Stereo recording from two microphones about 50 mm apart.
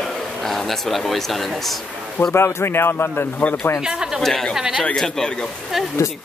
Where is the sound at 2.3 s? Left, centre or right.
Left.